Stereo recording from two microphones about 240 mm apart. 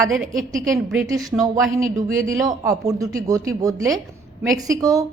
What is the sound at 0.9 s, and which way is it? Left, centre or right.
A man's voice, centre.